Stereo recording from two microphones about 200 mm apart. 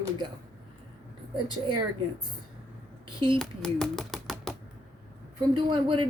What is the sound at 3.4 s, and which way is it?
Speech, centre (ahead or behind).